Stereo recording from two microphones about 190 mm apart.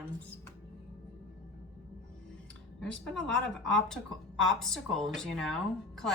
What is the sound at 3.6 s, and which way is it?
Speech, 5° left (ahead or behind).